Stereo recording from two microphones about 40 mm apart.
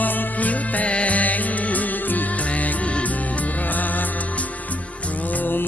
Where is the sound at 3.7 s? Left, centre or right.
Left.